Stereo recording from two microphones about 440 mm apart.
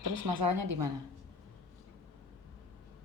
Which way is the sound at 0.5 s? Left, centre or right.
Right.